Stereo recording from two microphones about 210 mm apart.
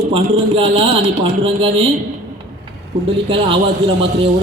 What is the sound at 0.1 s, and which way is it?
Speech, 25° right (ahead or behind).